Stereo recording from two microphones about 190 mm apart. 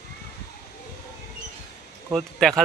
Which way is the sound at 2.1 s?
Centre (ahead or behind).